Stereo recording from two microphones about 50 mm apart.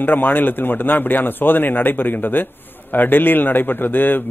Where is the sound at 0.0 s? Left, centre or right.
Left.